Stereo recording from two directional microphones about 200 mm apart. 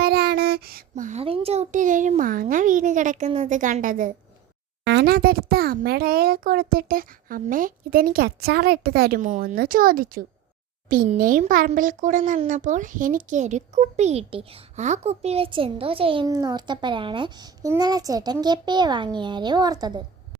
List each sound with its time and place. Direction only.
0.0 s speech: 50° right (ahead or behind)
4.8 s a child's voice: 55° right (ahead or behind); by 20.0 s 20° right (ahead or behind)